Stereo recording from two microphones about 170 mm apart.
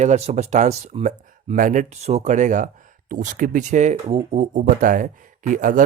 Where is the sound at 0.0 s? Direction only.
40° right (ahead or behind).